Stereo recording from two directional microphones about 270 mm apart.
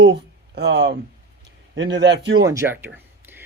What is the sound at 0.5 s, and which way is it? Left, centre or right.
Speech, right.